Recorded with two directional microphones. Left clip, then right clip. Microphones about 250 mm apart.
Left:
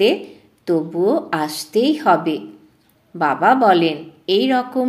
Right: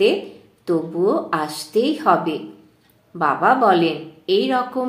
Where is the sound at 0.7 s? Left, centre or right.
Left.